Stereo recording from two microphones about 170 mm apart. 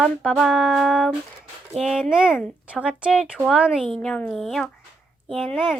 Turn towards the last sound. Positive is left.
turn(degrees=0)  # may be behind; listen again after turning